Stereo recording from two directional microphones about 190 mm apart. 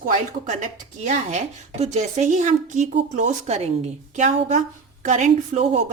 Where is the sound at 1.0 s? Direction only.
35° right (ahead or behind).